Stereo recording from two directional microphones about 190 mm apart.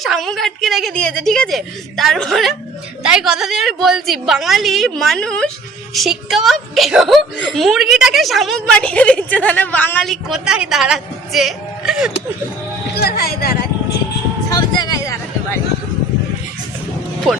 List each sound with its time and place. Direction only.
0.0 s a woman's voice: centre (ahead or behind)
13.0 s speech: 55° left (ahead or behind)
14.5 s music: 20° left (ahead or behind)